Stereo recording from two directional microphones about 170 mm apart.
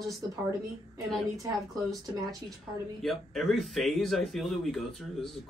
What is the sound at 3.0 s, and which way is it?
Speech, centre (ahead or behind).